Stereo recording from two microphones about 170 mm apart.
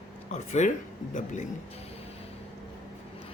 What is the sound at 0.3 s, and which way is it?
A man's voice, 45° left (ahead or behind).